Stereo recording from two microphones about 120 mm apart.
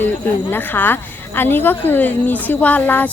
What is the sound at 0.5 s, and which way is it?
Speech, 15° left (ahead or behind).